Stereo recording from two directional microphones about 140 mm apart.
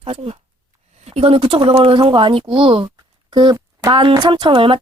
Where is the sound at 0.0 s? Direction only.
40° right (ahead or behind).